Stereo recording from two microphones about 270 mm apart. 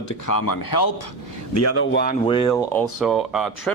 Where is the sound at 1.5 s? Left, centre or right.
Left.